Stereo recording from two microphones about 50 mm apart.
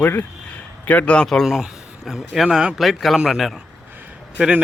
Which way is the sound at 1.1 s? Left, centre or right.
Centre.